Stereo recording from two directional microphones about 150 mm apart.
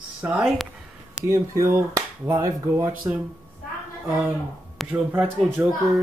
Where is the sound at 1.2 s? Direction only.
20° right (ahead or behind).